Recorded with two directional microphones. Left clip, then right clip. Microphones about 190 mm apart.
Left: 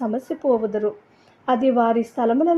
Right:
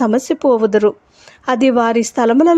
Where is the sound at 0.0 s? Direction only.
35° right (ahead or behind).